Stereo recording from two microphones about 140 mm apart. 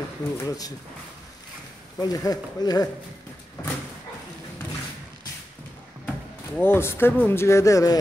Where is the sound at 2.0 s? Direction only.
25° left (ahead or behind).